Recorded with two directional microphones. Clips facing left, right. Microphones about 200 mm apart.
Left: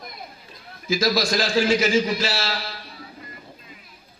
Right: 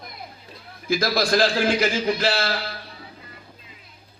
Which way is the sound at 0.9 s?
60° right (ahead or behind).